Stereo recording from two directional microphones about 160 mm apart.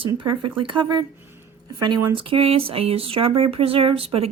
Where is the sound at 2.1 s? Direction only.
35° right (ahead or behind).